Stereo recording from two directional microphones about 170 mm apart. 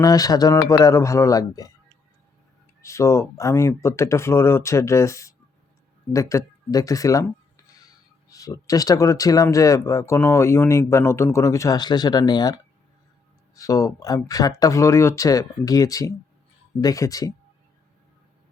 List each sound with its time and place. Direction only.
0.0 s speech: 20° left (ahead or behind)
2.8 s speech: 15° left (ahead or behind)
13.6 s speech: 20° left (ahead or behind)